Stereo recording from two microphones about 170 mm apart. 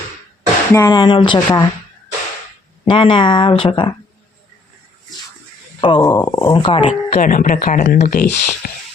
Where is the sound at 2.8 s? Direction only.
30° left (ahead or behind).